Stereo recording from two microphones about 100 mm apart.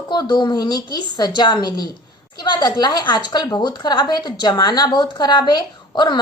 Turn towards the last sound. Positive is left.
turn(degrees=45)  # may be behind; listen again after turning